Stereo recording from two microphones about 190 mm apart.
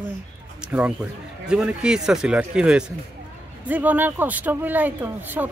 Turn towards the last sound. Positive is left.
turn(degrees=-10)  # may be behind; listen again after turning